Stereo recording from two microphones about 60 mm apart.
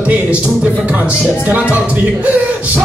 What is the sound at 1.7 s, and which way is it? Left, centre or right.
Speech, right.